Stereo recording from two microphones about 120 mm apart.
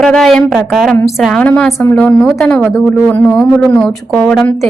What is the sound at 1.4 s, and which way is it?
A woman's voice, 10° left (ahead or behind).